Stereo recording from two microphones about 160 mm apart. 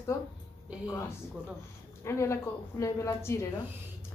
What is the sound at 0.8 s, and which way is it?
A woman's voice, 20° left (ahead or behind).